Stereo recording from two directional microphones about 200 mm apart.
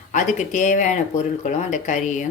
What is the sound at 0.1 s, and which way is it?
A woman's voice, 40° left (ahead or behind).